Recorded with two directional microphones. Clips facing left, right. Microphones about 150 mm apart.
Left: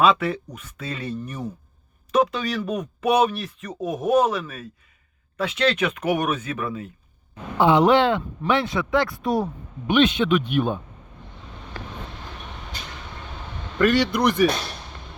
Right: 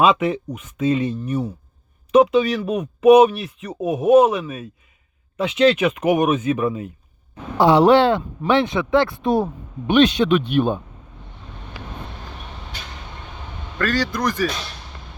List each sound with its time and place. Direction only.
0.0 s speech: 15° right (ahead or behind)
7.6 s speech: 35° right (ahead or behind)
13.7 s a man's voice: 20° left (ahead or behind)